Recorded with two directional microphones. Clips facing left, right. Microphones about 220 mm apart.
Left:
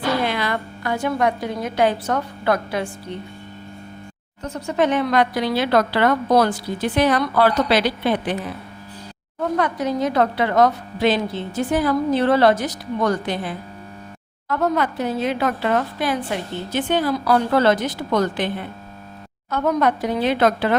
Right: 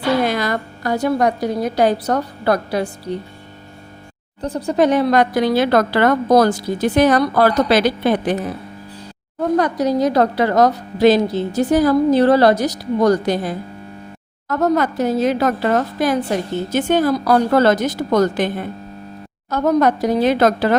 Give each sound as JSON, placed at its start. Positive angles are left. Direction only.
{"t": 0.3, "sound": "a woman's voice", "side_deg": -40}
{"t": 4.4, "sound": "speech", "side_deg": -35}
{"t": 9.6, "sound": "a woman's voice", "side_deg": -40}